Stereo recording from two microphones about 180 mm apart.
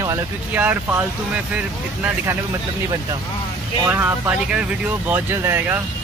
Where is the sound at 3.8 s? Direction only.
10° right (ahead or behind).